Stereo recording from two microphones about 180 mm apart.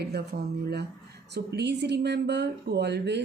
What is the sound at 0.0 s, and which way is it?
Speech, 65° right (ahead or behind).